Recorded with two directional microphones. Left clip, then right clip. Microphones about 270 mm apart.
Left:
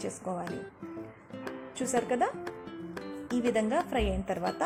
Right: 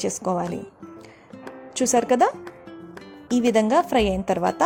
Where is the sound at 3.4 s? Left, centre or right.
Right.